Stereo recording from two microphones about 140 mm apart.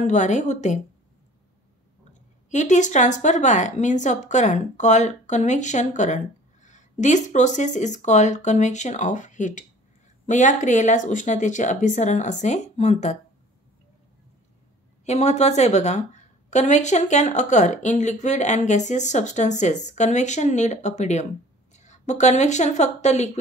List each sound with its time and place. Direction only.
0.0 s a woman's voice: 60° left (ahead or behind)
2.5 s a woman's voice: 60° left (ahead or behind)
15.0 s a woman's voice: 50° left (ahead or behind)